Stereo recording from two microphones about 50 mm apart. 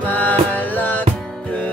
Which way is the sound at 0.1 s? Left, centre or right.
Left.